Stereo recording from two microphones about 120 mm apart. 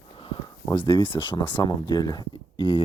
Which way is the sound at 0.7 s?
40° left (ahead or behind).